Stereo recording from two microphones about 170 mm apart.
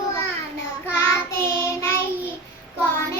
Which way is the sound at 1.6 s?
15° left (ahead or behind).